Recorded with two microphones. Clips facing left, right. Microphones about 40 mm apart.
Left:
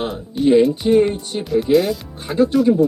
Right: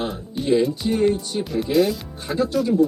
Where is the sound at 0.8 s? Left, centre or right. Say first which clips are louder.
Left 9 dB; left.